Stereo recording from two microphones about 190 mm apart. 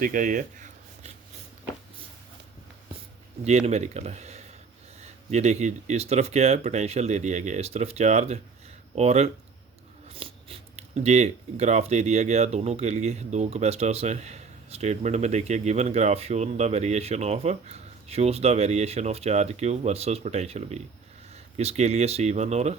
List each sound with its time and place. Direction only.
0.0 s speech: 45° right (ahead or behind)
3.7 s speech: 35° right (ahead or behind)